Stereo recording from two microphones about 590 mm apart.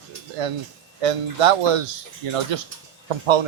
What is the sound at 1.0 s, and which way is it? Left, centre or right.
Speech, right.